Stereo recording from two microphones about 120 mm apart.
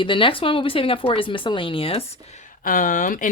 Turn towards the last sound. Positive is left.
turn(degrees=90)